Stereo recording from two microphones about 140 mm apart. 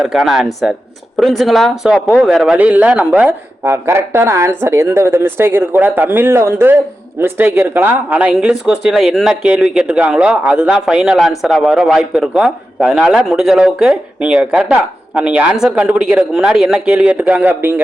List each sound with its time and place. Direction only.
0.0 s speech: centre (ahead or behind)